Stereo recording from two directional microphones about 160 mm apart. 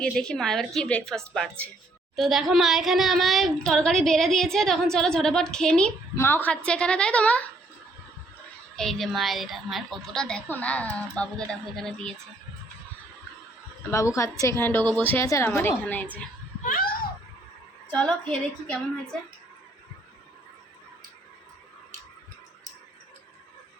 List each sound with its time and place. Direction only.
0.0 s a woman's voice: 5° left (ahead or behind)
8.7 s speech: 5° left (ahead or behind)
13.9 s a woman's voice: 20° left (ahead or behind)
16.6 s a sound: 65° left (ahead or behind)
17.9 s a woman's voice: 5° left (ahead or behind)